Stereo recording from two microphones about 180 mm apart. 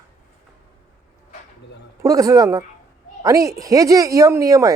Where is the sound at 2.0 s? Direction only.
20° right (ahead or behind).